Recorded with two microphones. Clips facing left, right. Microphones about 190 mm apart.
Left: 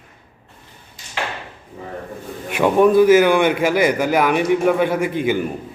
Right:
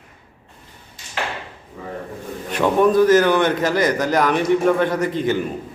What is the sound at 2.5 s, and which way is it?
A man's voice, 10° left (ahead or behind).